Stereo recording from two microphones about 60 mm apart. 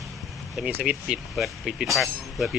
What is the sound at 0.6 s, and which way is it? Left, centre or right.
Speech, centre.